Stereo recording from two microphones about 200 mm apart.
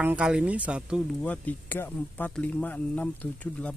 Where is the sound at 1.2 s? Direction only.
10° left (ahead or behind).